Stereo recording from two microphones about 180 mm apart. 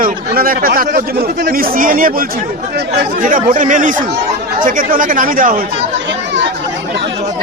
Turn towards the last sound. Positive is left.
turn(degrees=-50)  # may be behind; listen again after turning